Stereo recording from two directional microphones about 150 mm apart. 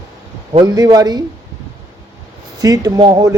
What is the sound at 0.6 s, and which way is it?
Speech, 25° right (ahead or behind).